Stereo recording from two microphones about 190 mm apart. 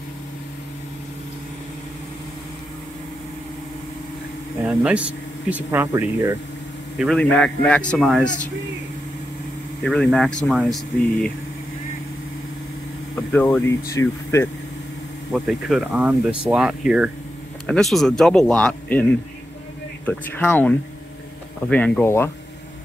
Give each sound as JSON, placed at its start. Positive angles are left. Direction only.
{"t": 4.6, "sound": "speech", "side_deg": -5}
{"t": 7.0, "sound": "speech", "side_deg": 5}
{"t": 9.8, "sound": "speech", "side_deg": 5}
{"t": 13.1, "sound": "speech", "side_deg": 10}
{"t": 15.3, "sound": "speech", "side_deg": 0}
{"t": 20.1, "sound": "speech", "side_deg": 10}